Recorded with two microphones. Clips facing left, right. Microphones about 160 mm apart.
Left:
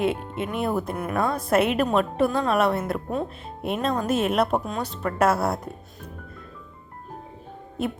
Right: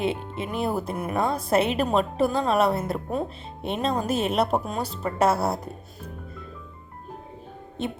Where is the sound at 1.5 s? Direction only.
30° right (ahead or behind).